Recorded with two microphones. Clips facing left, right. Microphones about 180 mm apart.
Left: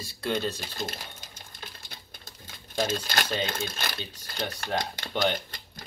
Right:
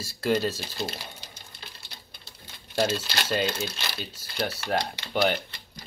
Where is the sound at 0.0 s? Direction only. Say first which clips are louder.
Right 4 dB; centre (ahead or behind).